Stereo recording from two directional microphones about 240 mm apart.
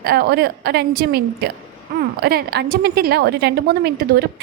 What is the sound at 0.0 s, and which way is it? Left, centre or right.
A woman's voice, right.